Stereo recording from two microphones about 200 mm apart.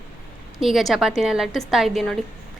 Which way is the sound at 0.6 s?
Centre (ahead or behind).